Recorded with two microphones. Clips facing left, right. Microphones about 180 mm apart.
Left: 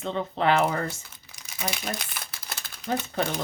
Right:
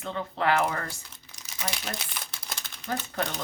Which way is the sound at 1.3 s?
10° left (ahead or behind).